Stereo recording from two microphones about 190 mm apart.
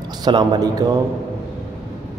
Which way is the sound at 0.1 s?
20° right (ahead or behind).